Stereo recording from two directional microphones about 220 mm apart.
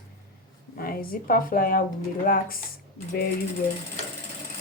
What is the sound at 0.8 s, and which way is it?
A woman's voice, 40° left (ahead or behind).